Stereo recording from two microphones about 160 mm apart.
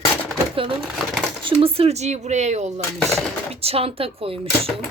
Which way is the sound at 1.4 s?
35° right (ahead or behind).